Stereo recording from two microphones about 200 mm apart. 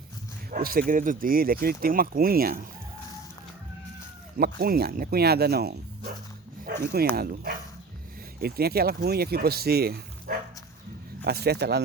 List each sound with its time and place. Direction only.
0.5 s speech: 45° right (ahead or behind)
4.4 s speech: 50° right (ahead or behind)